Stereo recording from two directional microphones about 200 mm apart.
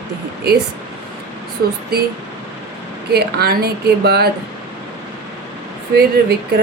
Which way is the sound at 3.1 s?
50° right (ahead or behind).